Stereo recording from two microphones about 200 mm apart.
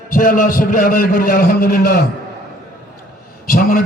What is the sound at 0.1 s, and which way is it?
A man's voice, 45° left (ahead or behind).